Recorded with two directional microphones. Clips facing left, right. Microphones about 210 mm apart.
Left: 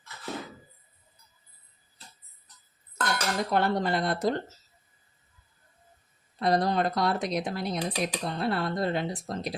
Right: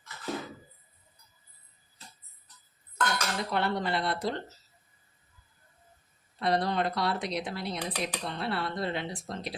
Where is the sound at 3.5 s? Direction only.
45° left (ahead or behind).